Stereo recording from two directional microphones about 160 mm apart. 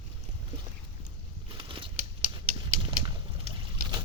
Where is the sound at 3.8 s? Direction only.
65° right (ahead or behind).